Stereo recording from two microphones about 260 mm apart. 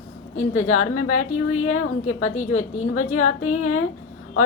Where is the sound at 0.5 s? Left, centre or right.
Left.